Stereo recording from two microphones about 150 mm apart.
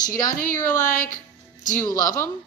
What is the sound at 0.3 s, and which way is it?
Speech, 65° left (ahead or behind).